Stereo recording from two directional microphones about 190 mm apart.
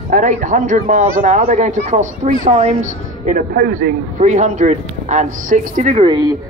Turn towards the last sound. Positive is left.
turn(degrees=-40)  # may be behind; listen again after turning